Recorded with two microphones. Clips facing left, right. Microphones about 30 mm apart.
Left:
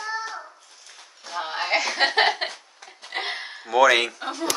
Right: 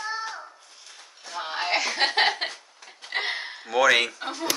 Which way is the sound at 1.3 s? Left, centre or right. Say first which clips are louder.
Left 2 dB; centre.